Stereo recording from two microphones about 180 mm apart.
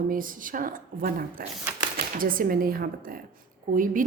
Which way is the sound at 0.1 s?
50° right (ahead or behind).